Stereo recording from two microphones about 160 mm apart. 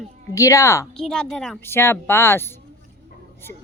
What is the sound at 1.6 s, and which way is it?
Speech, 15° left (ahead or behind).